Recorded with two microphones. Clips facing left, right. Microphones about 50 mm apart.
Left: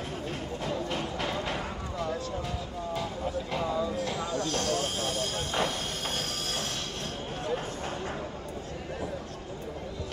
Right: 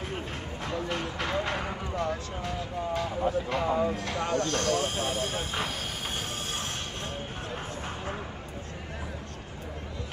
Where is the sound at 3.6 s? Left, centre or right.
Right.